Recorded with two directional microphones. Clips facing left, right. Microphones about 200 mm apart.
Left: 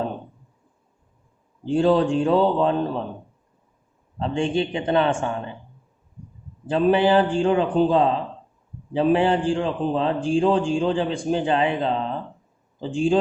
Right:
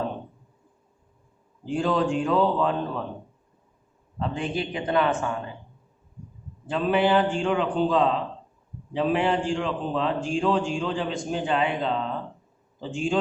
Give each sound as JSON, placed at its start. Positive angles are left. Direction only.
{"t": 1.6, "sound": "a man's voice", "side_deg": 30}
{"t": 4.2, "sound": "a man's voice", "side_deg": 30}
{"t": 6.7, "sound": "a man's voice", "side_deg": 30}